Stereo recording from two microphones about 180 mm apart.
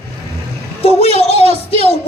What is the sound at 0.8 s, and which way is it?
Speech, 35° left (ahead or behind).